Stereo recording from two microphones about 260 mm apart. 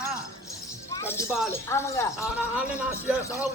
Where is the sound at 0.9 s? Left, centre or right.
Centre.